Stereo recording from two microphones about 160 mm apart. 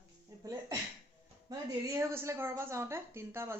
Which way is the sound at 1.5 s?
20° right (ahead or behind).